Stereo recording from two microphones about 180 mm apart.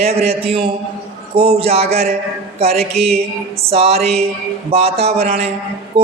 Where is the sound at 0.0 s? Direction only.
35° right (ahead or behind).